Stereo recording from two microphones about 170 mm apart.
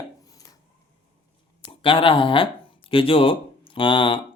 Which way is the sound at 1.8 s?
30° left (ahead or behind).